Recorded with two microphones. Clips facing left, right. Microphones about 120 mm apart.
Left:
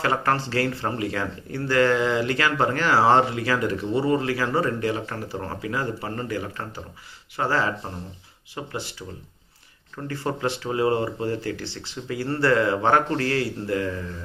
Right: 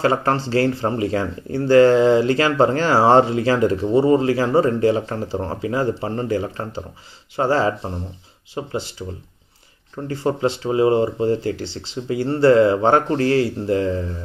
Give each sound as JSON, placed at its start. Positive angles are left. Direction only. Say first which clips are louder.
{"t": 0.0, "sound": "speech", "louder": "right 5 dB", "side_deg": -25}
{"t": 10.0, "sound": "speech", "louder": "right 6 dB", "side_deg": -25}